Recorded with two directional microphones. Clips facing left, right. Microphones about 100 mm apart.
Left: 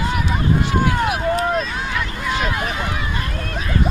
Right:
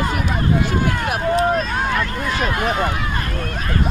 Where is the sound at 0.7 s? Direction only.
45° right (ahead or behind).